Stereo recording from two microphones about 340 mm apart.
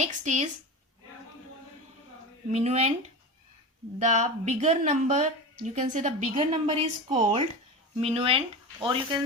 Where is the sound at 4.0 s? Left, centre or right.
Right.